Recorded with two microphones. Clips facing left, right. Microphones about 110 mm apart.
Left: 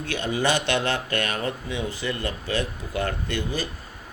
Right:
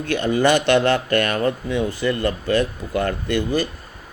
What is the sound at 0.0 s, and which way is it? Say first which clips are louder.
Speech: right 7 dB; 55° right (ahead or behind).